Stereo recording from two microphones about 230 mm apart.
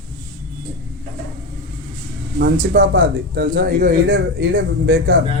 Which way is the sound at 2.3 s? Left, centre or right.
Right.